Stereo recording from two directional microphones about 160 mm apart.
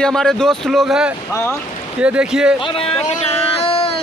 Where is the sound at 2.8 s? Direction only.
35° left (ahead or behind).